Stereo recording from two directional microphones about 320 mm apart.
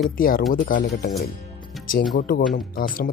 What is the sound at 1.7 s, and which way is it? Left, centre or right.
Music, centre.